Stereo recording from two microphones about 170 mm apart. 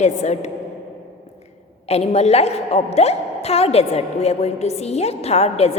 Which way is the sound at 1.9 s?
40° left (ahead or behind).